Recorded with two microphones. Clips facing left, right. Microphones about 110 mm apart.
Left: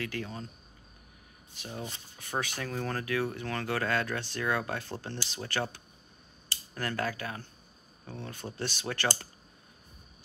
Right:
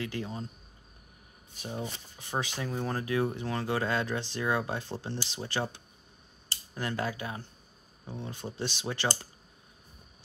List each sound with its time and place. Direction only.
0.0 s speech: 20° right (ahead or behind)
1.7 s speech: 20° right (ahead or behind)